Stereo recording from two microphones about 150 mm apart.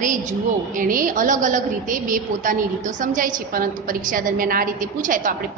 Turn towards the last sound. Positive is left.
turn(degrees=-60)  # may be behind; listen again after turning